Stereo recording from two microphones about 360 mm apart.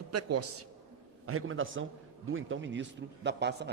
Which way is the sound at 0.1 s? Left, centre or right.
Right.